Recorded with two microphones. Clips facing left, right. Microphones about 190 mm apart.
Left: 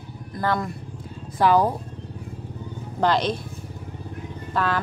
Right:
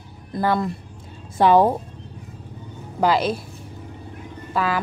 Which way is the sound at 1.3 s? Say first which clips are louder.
Right 4 dB; 25° right (ahead or behind).